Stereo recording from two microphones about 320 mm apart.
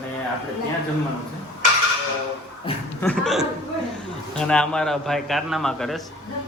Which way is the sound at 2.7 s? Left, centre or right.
Centre.